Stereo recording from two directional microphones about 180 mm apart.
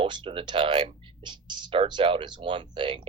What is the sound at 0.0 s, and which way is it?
Speech, 25° right (ahead or behind).